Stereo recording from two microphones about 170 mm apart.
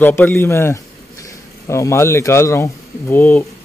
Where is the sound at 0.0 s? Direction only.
10° left (ahead or behind).